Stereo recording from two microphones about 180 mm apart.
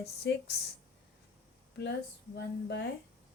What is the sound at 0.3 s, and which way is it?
Speech, 70° left (ahead or behind).